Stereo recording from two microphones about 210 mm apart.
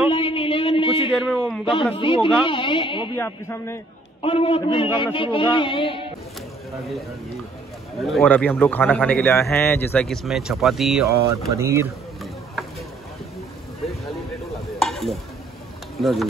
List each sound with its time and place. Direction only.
0.1 s a sound: 25° left (ahead or behind)
1.1 s a man's voice: centre (ahead or behind)
2.0 s a man's voice: 25° left (ahead or behind)
4.2 s a man's voice: 25° left (ahead or behind)
8.0 s a man's voice: 5° left (ahead or behind)
11.5 s speech: 15° right (ahead or behind)
13.8 s a sound: centre (ahead or behind)
16.0 s a man's voice: centre (ahead or behind)